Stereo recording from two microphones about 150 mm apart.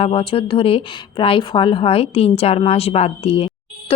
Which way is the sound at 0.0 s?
40° left (ahead or behind).